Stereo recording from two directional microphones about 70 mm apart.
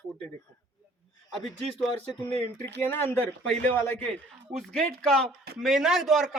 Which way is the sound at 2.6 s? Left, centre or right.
Left.